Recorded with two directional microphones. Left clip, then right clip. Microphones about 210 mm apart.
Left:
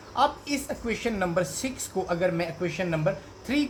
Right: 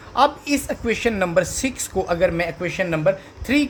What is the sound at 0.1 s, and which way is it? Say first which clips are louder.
Speech: right 7 dB; 55° right (ahead or behind).